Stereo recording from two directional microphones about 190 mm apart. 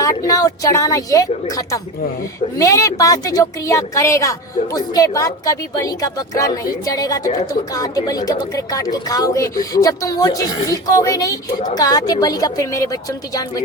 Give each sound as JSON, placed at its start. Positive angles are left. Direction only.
{"t": 0.0, "sound": "speech", "side_deg": 15}